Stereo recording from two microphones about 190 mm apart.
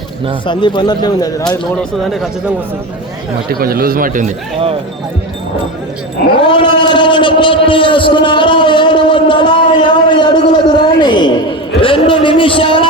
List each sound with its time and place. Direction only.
0.4 s a man's voice: 25° left (ahead or behind)
3.5 s a man's voice: 50° right (ahead or behind)
6.4 s a man's voice: 25° left (ahead or behind)